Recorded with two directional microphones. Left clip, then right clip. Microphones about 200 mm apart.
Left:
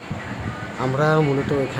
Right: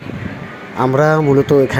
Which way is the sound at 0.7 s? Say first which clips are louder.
Right 7 dB; 30° right (ahead or behind).